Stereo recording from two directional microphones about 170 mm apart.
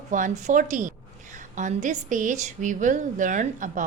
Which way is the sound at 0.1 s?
45° right (ahead or behind).